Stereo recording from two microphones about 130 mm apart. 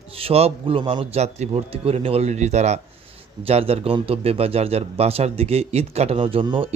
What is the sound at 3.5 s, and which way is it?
Speech, 50° right (ahead or behind).